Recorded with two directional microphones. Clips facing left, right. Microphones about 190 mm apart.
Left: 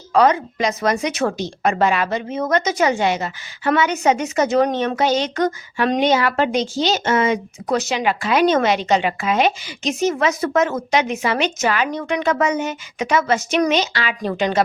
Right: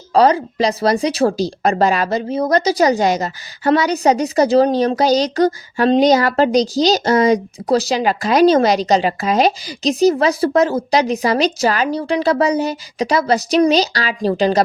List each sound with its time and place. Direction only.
0.1 s speech: 35° right (ahead or behind)